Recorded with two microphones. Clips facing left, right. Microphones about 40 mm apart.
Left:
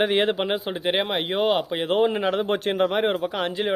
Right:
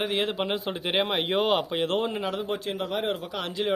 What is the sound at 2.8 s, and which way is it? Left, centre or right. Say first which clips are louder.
Speech: left 7 dB; left.